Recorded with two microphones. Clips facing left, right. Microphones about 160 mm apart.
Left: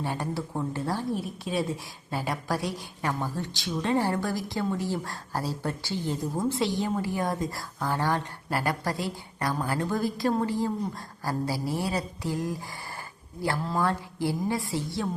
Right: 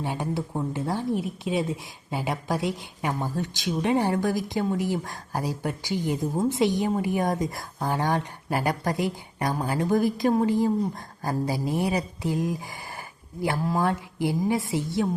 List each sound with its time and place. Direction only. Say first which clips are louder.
0.0 s a woman's voice: right 2 dB; 15° right (ahead or behind)